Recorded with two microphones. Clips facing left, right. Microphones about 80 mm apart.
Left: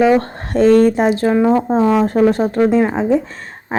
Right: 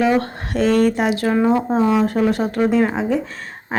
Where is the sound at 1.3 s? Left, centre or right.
Centre.